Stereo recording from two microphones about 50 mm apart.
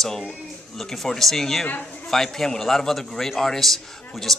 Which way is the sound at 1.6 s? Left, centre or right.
Left.